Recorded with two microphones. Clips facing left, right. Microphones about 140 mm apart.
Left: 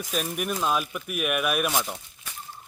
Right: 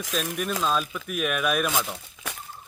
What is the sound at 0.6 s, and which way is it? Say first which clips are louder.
A man's voice: even; 10° left (ahead or behind).